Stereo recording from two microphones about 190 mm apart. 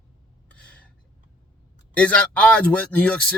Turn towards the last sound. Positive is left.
turn(degrees=5)  # may be behind; listen again after turning